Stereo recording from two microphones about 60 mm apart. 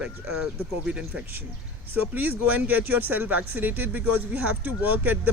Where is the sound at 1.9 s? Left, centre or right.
Right.